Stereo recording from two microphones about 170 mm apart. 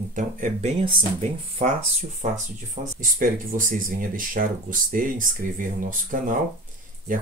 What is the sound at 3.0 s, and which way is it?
Speech, 55° right (ahead or behind).